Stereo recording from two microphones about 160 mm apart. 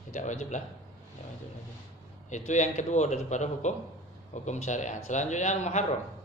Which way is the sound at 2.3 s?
50° left (ahead or behind).